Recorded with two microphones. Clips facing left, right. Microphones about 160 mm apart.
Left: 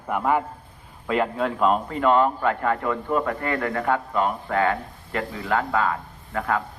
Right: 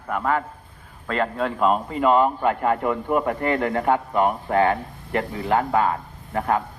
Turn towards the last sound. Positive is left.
turn(degrees=-25)  # may be behind; listen again after turning